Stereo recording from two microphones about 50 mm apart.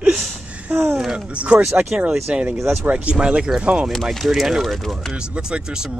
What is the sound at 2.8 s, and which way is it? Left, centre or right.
Speech, right.